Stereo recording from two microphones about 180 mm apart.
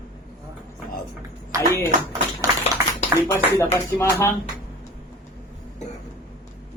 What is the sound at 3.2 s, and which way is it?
Speech, 15° left (ahead or behind).